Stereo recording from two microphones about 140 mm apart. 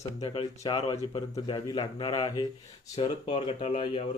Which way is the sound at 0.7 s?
45° left (ahead or behind).